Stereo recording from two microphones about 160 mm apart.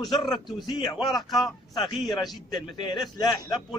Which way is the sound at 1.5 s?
30° left (ahead or behind).